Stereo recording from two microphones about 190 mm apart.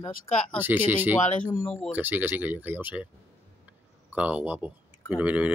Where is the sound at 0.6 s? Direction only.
10° right (ahead or behind).